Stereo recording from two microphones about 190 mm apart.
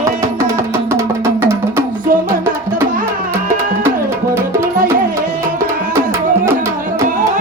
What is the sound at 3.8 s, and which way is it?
Music, 15° right (ahead or behind).